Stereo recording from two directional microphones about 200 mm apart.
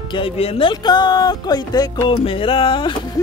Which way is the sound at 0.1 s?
30° left (ahead or behind).